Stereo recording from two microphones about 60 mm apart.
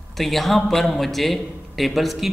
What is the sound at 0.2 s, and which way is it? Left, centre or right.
A man's voice, centre.